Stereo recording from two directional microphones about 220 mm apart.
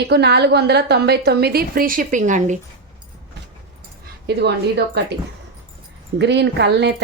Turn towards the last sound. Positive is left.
turn(degrees=-50)  # may be behind; listen again after turning